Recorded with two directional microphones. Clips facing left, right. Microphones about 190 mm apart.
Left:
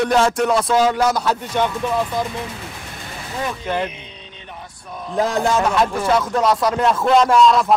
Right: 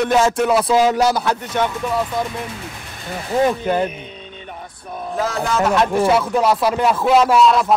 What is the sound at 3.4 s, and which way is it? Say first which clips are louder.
Speech: right 4 dB; 40° right (ahead or behind).